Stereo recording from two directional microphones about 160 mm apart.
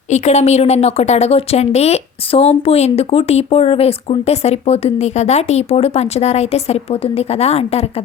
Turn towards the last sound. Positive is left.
turn(degrees=40)  # may be behind; listen again after turning